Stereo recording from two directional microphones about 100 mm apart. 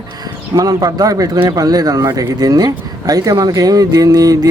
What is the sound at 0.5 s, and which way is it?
Speech, 40° right (ahead or behind).